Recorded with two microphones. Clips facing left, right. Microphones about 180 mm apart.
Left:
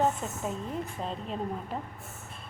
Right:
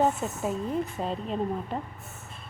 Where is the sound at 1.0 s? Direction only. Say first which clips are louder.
Right 4 dB; centre (ahead or behind).